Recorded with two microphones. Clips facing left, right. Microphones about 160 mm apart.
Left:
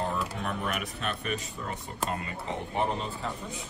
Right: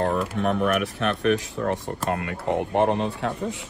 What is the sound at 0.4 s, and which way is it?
Speech, 70° right (ahead or behind).